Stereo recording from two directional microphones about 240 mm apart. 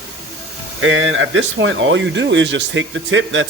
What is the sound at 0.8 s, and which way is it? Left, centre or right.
Speech, right.